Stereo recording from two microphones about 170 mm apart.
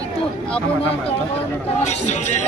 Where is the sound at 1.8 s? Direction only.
40° left (ahead or behind).